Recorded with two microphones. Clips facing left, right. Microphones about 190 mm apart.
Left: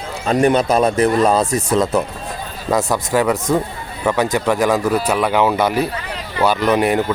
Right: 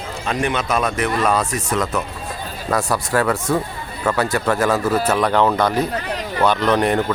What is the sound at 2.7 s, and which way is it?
Speech, 20° left (ahead or behind).